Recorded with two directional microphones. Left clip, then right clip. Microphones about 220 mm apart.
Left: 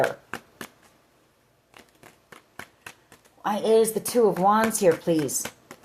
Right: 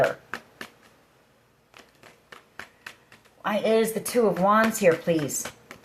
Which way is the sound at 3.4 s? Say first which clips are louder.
Left 2 dB; 45° left (ahead or behind).